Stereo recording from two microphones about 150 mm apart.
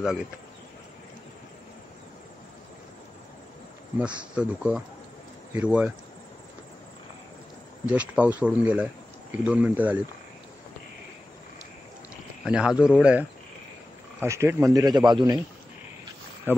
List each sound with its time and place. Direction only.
0.0 s speech: 5° right (ahead or behind)
4.4 s speech: 5° right (ahead or behind)
7.8 s speech: 10° right (ahead or behind)
12.4 s speech: 5° right (ahead or behind)
14.2 s a man's voice: 20° right (ahead or behind)
16.5 s a sound: 15° right (ahead or behind)